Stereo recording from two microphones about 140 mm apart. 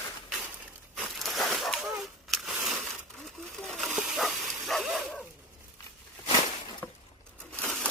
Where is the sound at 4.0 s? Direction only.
Centre (ahead or behind).